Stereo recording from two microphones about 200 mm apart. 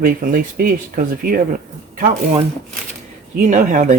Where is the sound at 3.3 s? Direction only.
40° right (ahead or behind).